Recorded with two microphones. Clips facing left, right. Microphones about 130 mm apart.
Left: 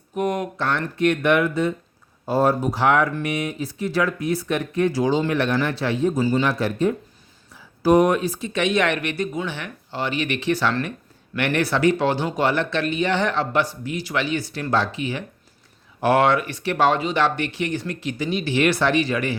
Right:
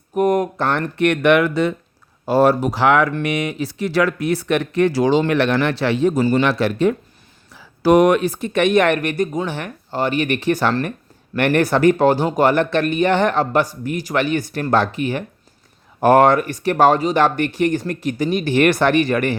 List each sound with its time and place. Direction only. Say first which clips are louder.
0.1 s speech: right 7 dB; 45° right (ahead or behind)